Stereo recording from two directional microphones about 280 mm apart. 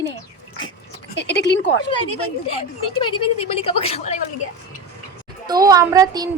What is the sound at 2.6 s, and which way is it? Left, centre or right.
A woman's voice, centre.